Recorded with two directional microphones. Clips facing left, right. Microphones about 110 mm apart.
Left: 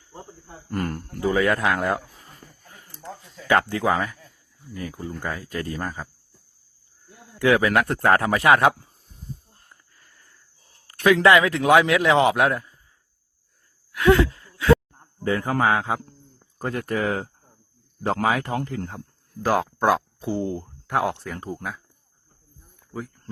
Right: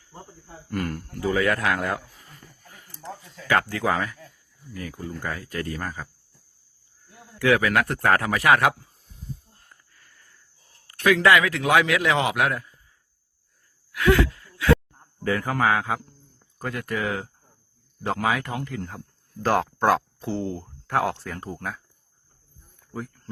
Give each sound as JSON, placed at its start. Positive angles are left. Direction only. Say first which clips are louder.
{"t": 0.7, "sound": "a man's voice", "louder": "left 1 dB", "side_deg": 35}
{"t": 7.3, "sound": "a man's voice", "louder": "left 2 dB", "side_deg": 25}
{"t": 9.9, "sound": "a sound", "louder": "even", "side_deg": 25}
{"t": 10.8, "sound": "a man's voice", "louder": "left 2 dB", "side_deg": 25}
{"t": 13.9, "sound": "a sound", "louder": "left 3 dB", "side_deg": 30}
{"t": 15.2, "sound": "a man's voice", "louder": "left 1 dB", "side_deg": 25}
{"t": 18.9, "sound": "speech", "louder": "left 2 dB", "side_deg": 10}
{"t": 21.4, "sound": "speech", "louder": "left 1 dB", "side_deg": 5}
{"t": 22.9, "sound": "a sound", "louder": "left 1 dB", "side_deg": 0}